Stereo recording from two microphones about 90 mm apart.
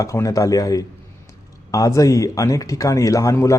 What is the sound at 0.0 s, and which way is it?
Speech, 35° left (ahead or behind).